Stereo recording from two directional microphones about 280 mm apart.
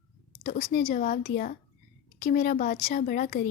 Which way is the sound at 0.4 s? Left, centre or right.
Left.